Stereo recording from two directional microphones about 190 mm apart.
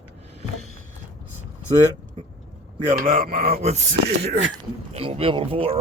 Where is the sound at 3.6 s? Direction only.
35° right (ahead or behind).